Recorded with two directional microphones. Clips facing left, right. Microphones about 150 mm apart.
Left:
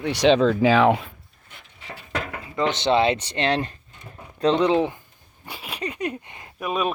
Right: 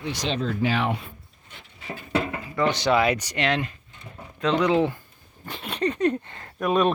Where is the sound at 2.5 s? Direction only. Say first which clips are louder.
Left 3 dB; 20° left (ahead or behind).